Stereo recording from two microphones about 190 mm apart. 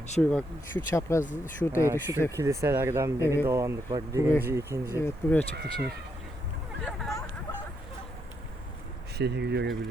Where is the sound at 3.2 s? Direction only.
15° left (ahead or behind).